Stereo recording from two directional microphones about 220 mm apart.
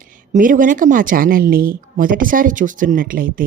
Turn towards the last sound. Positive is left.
turn(degrees=-40)  # may be behind; listen again after turning